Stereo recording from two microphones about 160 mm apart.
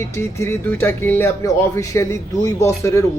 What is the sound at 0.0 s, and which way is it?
Speech, 15° left (ahead or behind).